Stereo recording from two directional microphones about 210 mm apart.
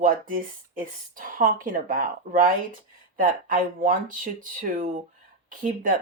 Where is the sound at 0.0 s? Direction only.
40° right (ahead or behind).